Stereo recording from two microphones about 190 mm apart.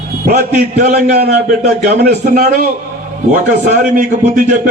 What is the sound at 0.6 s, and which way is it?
Speech, 50° right (ahead or behind).